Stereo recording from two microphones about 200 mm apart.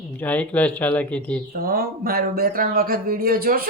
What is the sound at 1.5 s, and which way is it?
Speech, 50° right (ahead or behind).